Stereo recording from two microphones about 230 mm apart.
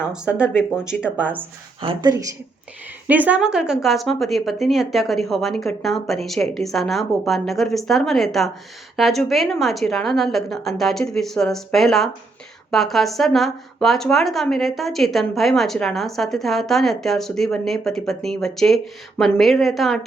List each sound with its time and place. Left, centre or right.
0.0 s speech: centre
1.8 s speech: right; by 20.1 s centre